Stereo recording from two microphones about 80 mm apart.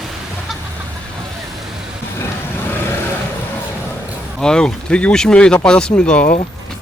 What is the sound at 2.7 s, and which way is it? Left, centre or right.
Vehicle, left.